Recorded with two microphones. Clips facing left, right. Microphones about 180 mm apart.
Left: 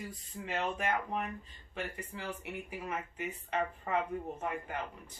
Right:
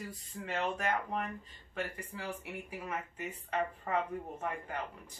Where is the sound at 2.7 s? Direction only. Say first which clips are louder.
Even; 5° left (ahead or behind).